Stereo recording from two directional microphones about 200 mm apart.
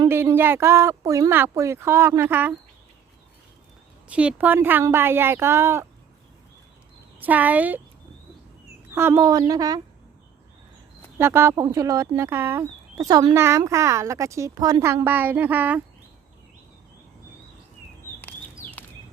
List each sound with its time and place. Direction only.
0.0 s speech: 15° right (ahead or behind)
4.1 s speech: 5° right (ahead or behind)
7.2 s speech: 10° right (ahead or behind)
9.0 s speech: 15° right (ahead or behind)
11.2 s speech: 10° right (ahead or behind)